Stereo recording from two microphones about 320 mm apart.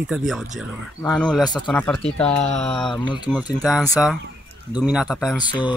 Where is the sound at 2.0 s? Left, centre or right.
Centre.